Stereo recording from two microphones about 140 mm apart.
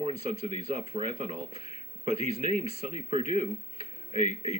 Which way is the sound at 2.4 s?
60° left (ahead or behind).